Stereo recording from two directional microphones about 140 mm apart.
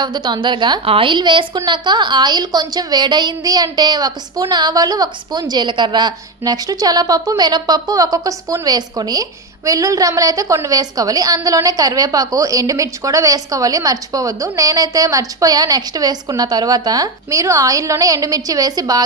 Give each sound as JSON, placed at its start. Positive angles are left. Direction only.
{"t": 0.0, "sound": "a woman's voice", "side_deg": -35}